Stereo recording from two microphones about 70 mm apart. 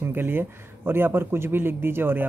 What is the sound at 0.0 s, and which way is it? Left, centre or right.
A man's voice, right.